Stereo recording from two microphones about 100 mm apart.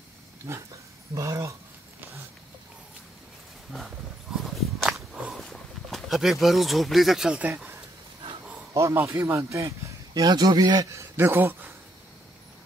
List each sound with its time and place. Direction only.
0.5 s speech: 35° right (ahead or behind)
3.7 s a sound: centre (ahead or behind); by 7.8 s 20° right (ahead or behind)
8.7 s speech: 30° right (ahead or behind)